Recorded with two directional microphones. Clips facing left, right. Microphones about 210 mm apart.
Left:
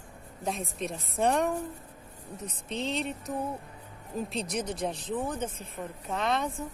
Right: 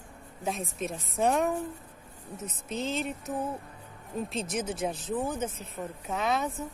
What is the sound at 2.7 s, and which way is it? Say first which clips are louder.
A woman's voice: even; centre (ahead or behind).